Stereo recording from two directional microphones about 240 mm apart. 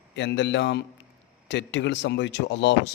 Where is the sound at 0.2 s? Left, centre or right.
Left.